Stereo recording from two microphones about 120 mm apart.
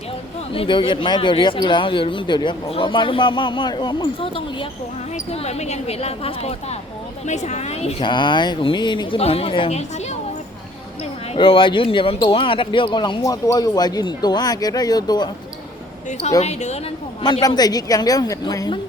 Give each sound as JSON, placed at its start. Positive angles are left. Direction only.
{"t": 0.5, "sound": "speech", "side_deg": 50}
{"t": 5.1, "sound": "speech", "side_deg": 60}
{"t": 7.3, "sound": "speech", "side_deg": 70}
{"t": 8.0, "sound": "speech", "side_deg": 40}
{"t": 11.3, "sound": "speech", "side_deg": 45}
{"t": 16.4, "sound": "speech", "side_deg": 70}
{"t": 17.4, "sound": "speech", "side_deg": 35}